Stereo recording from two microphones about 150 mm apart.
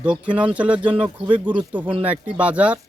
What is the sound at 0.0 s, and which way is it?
Speech, 10° right (ahead or behind).